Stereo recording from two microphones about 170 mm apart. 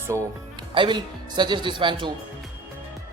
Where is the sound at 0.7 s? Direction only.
30° right (ahead or behind).